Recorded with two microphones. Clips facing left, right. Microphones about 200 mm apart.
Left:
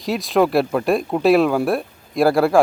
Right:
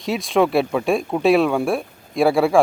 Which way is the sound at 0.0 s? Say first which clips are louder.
Left 1 dB; centre (ahead or behind).